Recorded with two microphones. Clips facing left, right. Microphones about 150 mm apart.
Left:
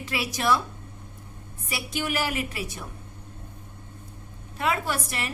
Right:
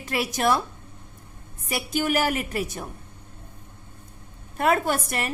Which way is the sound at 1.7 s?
45° right (ahead or behind).